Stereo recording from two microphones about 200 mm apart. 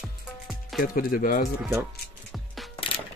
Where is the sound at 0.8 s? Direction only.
45° left (ahead or behind).